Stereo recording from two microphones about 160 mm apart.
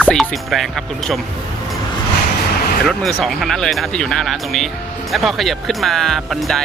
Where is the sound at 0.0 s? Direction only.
5° left (ahead or behind).